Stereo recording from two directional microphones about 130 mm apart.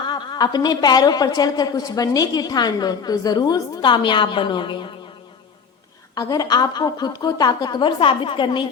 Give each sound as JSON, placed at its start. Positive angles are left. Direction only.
{"t": 0.1, "sound": "a woman's voice", "side_deg": 30}
{"t": 6.1, "sound": "a woman's voice", "side_deg": 30}